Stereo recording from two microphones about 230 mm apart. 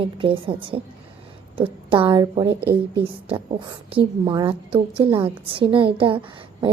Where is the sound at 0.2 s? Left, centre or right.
Right.